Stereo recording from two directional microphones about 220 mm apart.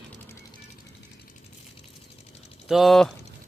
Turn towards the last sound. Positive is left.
turn(degrees=0)  # may be behind; listen again after turning